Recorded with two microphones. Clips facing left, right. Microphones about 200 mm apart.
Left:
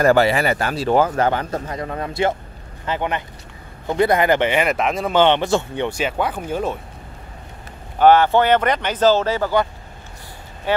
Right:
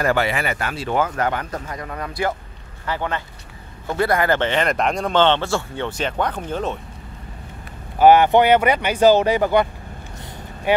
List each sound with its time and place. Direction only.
0.0 s a man's voice: 35° left (ahead or behind); by 6.8 s 10° left (ahead or behind)
8.0 s speech: 15° right (ahead or behind)